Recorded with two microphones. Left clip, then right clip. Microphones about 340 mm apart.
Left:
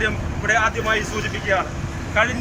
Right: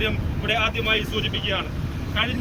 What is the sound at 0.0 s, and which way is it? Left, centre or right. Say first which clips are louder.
Speech: left 4 dB; centre.